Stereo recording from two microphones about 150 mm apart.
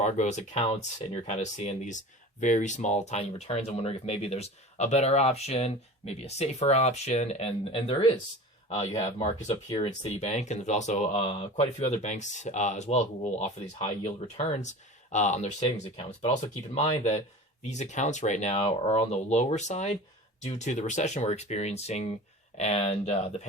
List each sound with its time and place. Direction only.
0.0 s speech: 50° left (ahead or behind)